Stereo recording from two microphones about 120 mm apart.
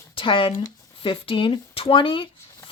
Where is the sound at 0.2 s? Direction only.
45° left (ahead or behind).